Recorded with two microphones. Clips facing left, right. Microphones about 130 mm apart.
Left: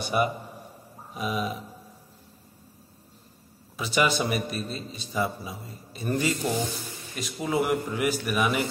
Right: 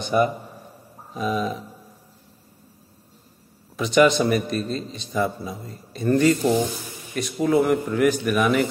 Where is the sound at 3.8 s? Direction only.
5° left (ahead or behind).